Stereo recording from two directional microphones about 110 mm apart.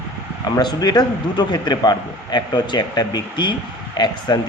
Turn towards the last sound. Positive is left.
turn(degrees=45)  # may be behind; listen again after turning